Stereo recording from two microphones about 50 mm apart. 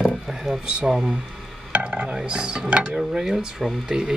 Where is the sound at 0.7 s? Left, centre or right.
Centre.